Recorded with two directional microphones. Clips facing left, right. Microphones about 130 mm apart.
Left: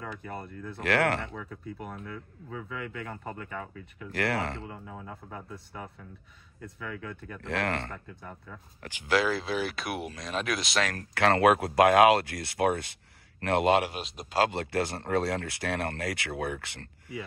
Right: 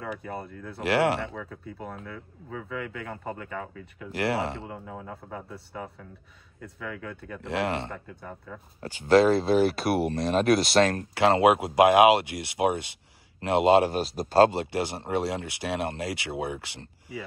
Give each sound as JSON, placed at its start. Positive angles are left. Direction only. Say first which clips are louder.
{"t": 0.7, "sound": "speech", "louder": "right 3 dB", "side_deg": -25}
{"t": 1.2, "sound": "speech", "louder": "right 4 dB", "side_deg": 0}
{"t": 1.8, "sound": "speech", "louder": "right 5 dB", "side_deg": -30}
{"t": 4.1, "sound": "speech", "louder": "right 2 dB", "side_deg": -25}
{"t": 4.7, "sound": "speech", "louder": "right 3 dB", "side_deg": -5}
{"t": 5.3, "sound": "speech", "louder": "right 3 dB", "side_deg": -25}
{"t": 6.6, "sound": "speech", "louder": "right 2 dB", "side_deg": -5}
{"t": 7.4, "sound": "speech", "louder": "right 3 dB", "side_deg": -25}